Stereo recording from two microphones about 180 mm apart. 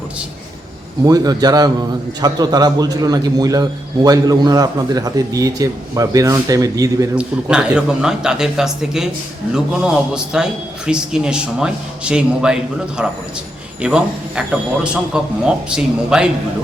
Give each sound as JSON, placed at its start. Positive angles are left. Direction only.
{"t": 1.0, "sound": "a man's voice", "side_deg": -20}
{"t": 7.2, "sound": "a man's voice", "side_deg": -5}